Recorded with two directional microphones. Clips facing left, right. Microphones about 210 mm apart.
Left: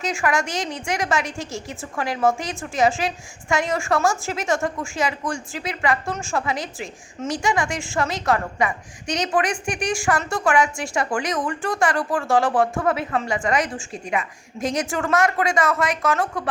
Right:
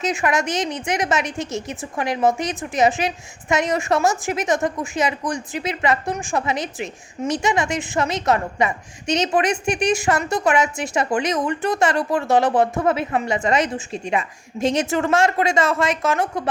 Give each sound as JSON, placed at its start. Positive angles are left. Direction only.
{"t": 0.0, "sound": "a woman's voice", "side_deg": -20}